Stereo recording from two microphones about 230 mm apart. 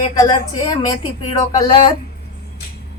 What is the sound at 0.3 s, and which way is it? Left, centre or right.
Speech, centre.